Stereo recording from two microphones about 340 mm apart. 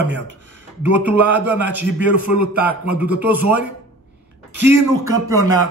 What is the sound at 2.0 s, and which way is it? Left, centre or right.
Speech, left.